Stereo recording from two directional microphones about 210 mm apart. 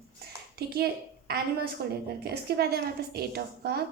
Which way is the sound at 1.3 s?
50° right (ahead or behind).